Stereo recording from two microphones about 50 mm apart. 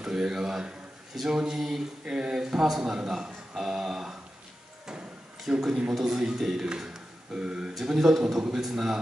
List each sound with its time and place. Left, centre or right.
0.0 s a man's voice: centre
5.8 s a man's voice: centre